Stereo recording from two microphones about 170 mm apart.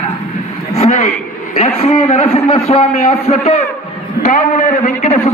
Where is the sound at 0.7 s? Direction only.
40° left (ahead or behind).